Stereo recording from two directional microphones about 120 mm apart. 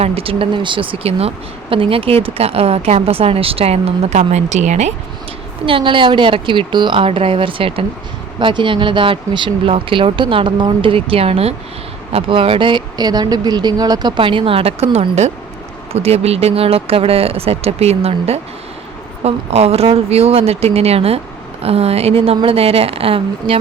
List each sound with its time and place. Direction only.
0.0 s speech: 55° right (ahead or behind); by 4.9 s 75° right (ahead or behind)
5.6 s speech: 45° right (ahead or behind)
14.2 s speech: 45° right (ahead or behind)
15.9 s speech: 60° right (ahead or behind)